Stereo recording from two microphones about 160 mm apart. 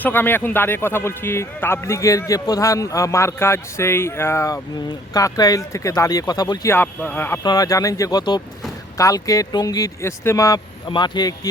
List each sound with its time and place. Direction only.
0.0 s a man's voice: 10° left (ahead or behind)
7.4 s speech: 25° left (ahead or behind)